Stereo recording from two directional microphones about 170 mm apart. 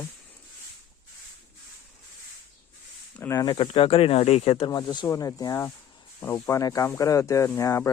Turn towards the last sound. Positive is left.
turn(degrees=15)  # may be behind; listen again after turning